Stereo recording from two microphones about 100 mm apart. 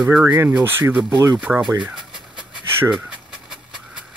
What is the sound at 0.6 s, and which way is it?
Speech, 20° right (ahead or behind).